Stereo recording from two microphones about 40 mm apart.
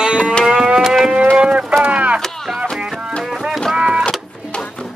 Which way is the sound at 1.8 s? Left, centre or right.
Right.